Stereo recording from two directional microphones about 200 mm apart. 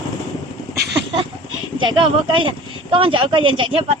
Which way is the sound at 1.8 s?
25° right (ahead or behind).